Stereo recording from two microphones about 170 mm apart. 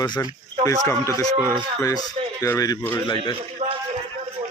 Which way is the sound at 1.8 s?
20° left (ahead or behind).